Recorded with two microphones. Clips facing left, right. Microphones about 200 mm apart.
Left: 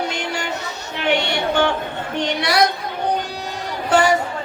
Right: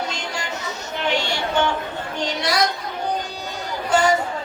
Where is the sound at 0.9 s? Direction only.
65° left (ahead or behind).